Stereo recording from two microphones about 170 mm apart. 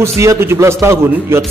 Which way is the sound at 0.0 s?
15° right (ahead or behind).